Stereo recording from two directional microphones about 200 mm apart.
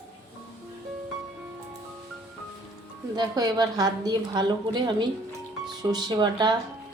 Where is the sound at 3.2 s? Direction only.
20° right (ahead or behind).